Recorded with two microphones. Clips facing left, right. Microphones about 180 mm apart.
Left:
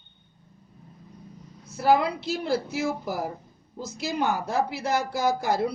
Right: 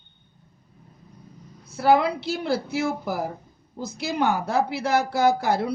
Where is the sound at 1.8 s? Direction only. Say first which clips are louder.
Right 2 dB; 65° right (ahead or behind).